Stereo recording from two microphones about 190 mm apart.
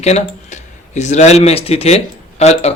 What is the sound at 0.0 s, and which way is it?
Speech, 35° left (ahead or behind).